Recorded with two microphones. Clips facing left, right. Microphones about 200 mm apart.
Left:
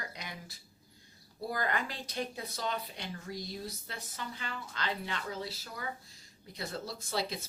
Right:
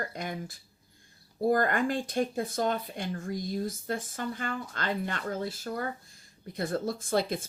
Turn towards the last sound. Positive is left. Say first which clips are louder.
# right 7 dB
turn(degrees=-50)  # may be behind; listen again after turning